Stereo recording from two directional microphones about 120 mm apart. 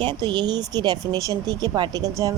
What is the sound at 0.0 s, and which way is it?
Speech, 40° right (ahead or behind).